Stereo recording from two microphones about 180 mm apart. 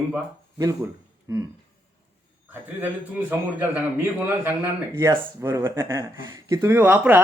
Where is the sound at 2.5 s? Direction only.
10° right (ahead or behind).